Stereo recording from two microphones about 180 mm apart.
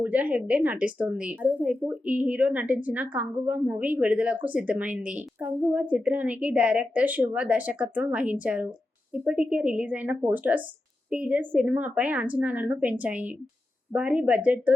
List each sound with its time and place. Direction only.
0.0 s a woman's voice: 10° right (ahead or behind)